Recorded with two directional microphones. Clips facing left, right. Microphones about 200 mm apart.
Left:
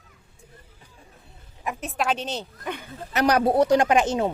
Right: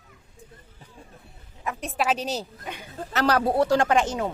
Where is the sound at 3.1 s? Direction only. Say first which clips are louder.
Left 2 dB; 15° left (ahead or behind).